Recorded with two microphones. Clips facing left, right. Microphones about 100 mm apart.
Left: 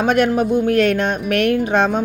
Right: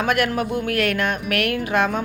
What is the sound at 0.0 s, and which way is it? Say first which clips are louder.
Speech: left 5 dB; 25° left (ahead or behind).